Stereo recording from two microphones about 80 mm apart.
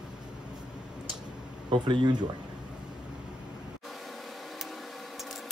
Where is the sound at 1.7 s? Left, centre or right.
Right.